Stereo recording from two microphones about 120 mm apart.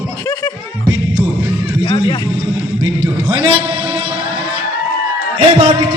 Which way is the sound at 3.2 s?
45° right (ahead or behind).